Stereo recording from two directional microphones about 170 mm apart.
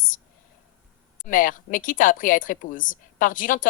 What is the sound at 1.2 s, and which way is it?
A woman's voice, 50° left (ahead or behind).